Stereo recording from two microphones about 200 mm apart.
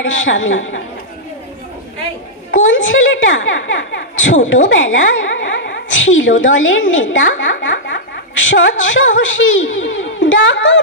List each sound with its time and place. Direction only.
0.0 s a woman's voice: 75° left (ahead or behind)
2.5 s a woman's voice: 70° left (ahead or behind)